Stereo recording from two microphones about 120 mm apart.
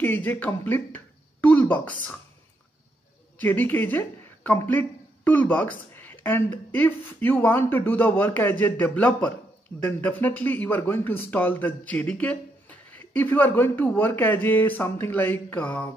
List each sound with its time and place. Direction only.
0.0 s speech: 15° left (ahead or behind)
3.3 s speech: 15° left (ahead or behind)